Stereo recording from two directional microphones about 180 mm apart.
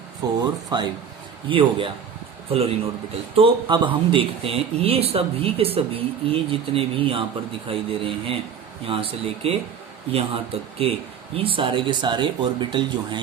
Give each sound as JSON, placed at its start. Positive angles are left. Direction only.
{"t": 0.2, "sound": "speech", "side_deg": -20}